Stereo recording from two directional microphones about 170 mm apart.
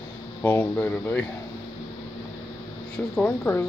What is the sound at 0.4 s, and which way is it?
Speech, 10° left (ahead or behind).